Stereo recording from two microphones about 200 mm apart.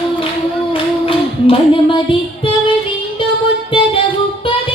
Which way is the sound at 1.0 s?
25° left (ahead or behind).